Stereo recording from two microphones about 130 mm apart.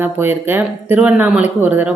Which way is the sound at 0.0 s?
15° right (ahead or behind).